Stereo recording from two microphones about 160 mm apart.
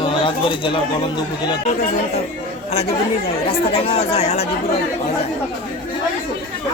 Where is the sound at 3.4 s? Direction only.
40° left (ahead or behind).